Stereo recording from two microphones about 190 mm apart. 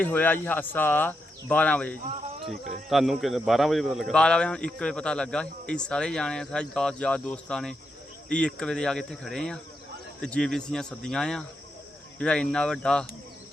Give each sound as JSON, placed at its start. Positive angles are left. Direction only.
{"t": 0.0, "sound": "speech", "side_deg": 10}
{"t": 2.4, "sound": "speech", "side_deg": -40}
{"t": 2.9, "sound": "a man's voice", "side_deg": 0}